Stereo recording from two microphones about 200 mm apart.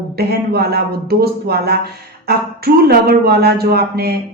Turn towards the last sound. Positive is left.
turn(degrees=-50)  # may be behind; listen again after turning